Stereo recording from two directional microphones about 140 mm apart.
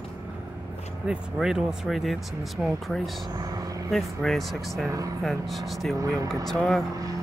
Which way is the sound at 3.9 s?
Centre (ahead or behind).